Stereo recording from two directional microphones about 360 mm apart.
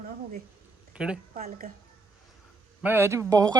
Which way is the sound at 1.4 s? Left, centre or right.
Right.